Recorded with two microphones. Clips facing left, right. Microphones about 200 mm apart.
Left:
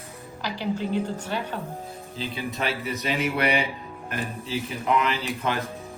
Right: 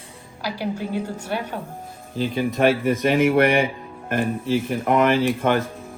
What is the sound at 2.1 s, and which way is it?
Speech, 50° right (ahead or behind).